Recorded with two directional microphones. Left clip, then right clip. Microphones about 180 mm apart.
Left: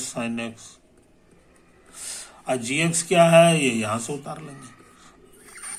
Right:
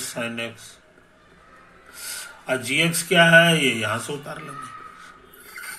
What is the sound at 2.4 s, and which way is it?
Speech, 30° left (ahead or behind).